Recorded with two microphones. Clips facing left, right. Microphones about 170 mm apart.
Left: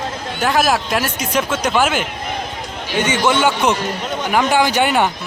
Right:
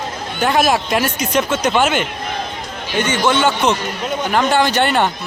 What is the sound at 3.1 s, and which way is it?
Speech, 15° left (ahead or behind).